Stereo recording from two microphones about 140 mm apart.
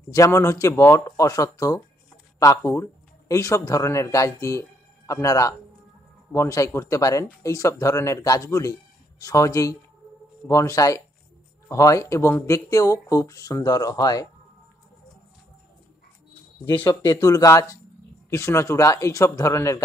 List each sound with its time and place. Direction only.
0.1 s speech: 20° left (ahead or behind)
16.7 s speech: 35° left (ahead or behind)
17.2 s speech: 25° left (ahead or behind)